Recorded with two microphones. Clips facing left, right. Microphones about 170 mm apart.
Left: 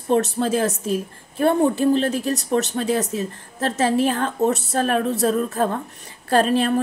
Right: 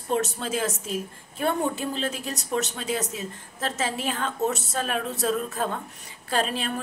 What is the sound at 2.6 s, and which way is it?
Speech, 55° left (ahead or behind).